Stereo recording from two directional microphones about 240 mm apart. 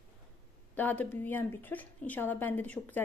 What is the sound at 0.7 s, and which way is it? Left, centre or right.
A woman's voice, centre.